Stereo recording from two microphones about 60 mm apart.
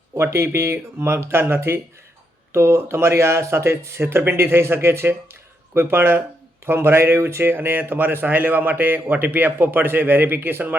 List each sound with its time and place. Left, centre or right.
0.3 s speech: right
2.5 s speech: right